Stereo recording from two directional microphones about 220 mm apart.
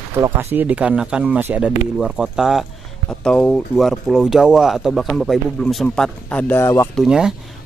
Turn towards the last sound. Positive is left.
turn(degrees=-5)  # may be behind; listen again after turning